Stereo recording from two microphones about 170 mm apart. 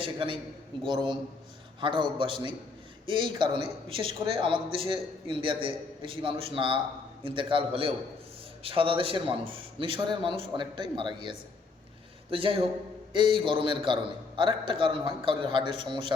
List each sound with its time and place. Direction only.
0.0 s a man's voice: 30° right (ahead or behind)